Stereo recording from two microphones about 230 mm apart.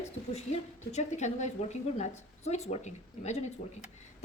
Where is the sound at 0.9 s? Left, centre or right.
Left.